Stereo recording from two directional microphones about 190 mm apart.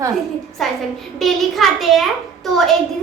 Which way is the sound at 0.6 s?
Centre (ahead or behind).